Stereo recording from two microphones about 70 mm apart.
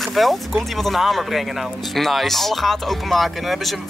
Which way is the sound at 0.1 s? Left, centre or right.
Centre.